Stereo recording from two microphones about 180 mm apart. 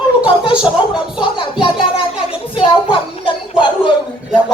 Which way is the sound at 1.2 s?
30° left (ahead or behind).